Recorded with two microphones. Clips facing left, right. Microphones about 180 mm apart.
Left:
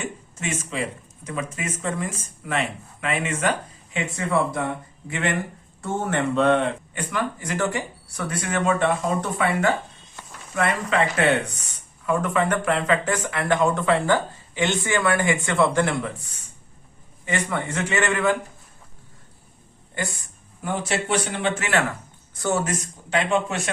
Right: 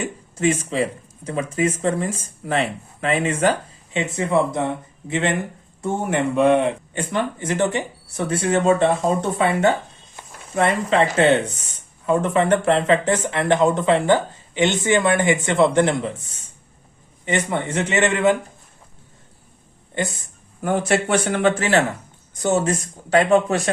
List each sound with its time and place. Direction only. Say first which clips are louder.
0.0 s speech: right 10 dB; 35° right (ahead or behind)
3.9 s speech: right 4 dB; 20° right (ahead or behind)
6.9 s speech: right 4 dB; 25° right (ahead or behind)
17.2 s speech: right 4 dB; 20° right (ahead or behind)
19.9 s speech: right 5 dB; 20° right (ahead or behind)
20.6 s a man's voice: right 6 dB; 50° right (ahead or behind); by 22.8 s 25° right (ahead or behind)
23.0 s speech: right 7 dB; 40° right (ahead or behind)